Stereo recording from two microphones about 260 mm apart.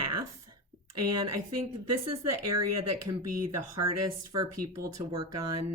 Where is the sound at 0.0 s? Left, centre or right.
Right.